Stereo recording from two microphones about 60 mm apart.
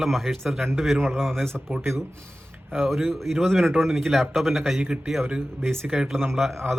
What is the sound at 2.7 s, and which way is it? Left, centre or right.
Speech, centre.